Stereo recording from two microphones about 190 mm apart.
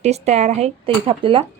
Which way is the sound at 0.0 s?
35° right (ahead or behind).